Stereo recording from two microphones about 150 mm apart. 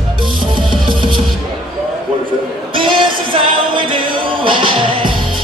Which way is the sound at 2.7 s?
35° right (ahead or behind).